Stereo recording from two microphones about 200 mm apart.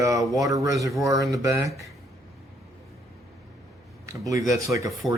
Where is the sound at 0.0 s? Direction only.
15° right (ahead or behind).